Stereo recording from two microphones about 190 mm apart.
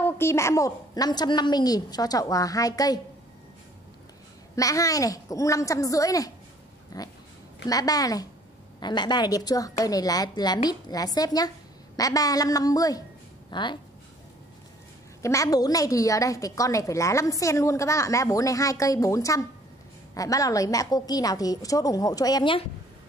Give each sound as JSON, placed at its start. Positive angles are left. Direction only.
{"t": 0.0, "sound": "a woman's voice", "side_deg": 15}
{"t": 4.6, "sound": "a woman's voice", "side_deg": 20}
{"t": 15.2, "sound": "a woman's voice", "side_deg": 15}